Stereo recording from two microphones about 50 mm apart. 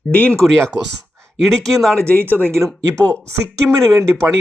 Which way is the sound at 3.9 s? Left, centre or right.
Right.